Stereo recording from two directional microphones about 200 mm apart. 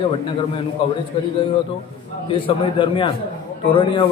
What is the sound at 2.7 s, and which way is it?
A man's voice, 25° left (ahead or behind).